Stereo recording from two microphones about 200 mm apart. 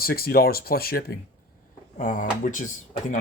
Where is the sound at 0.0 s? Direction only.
50° left (ahead or behind).